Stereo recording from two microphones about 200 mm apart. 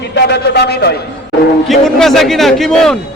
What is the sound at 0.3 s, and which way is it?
Speech, 55° left (ahead or behind).